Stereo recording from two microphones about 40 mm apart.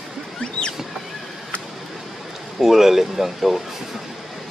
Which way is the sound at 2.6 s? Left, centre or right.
Centre.